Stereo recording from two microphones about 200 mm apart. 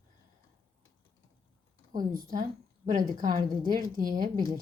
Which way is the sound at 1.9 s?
45° right (ahead or behind).